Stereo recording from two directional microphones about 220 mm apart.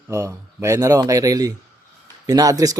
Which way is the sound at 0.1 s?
15° right (ahead or behind).